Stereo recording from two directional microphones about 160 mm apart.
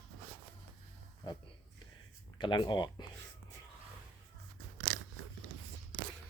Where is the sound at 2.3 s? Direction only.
30° left (ahead or behind).